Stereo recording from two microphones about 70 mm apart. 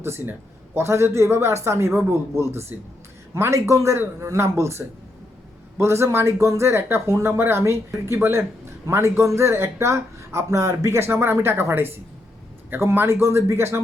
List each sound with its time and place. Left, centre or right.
0.0 s speech: right